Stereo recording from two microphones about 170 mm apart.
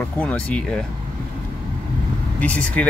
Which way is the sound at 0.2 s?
5° left (ahead or behind).